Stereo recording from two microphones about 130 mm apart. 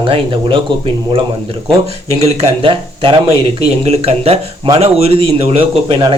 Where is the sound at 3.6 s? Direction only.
50° right (ahead or behind).